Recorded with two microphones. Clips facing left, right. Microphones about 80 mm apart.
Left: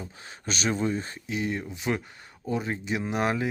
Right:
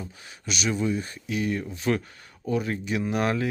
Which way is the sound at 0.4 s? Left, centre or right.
Left.